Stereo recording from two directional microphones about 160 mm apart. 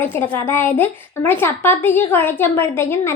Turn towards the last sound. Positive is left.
turn(degrees=15)  # may be behind; listen again after turning